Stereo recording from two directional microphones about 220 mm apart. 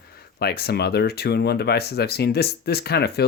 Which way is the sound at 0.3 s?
45° left (ahead or behind).